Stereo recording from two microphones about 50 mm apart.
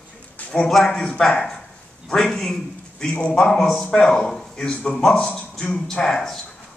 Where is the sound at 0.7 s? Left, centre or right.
Centre.